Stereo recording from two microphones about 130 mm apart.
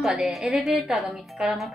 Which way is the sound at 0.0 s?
5° right (ahead or behind).